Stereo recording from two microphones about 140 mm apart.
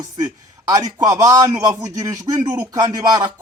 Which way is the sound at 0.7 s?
25° right (ahead or behind).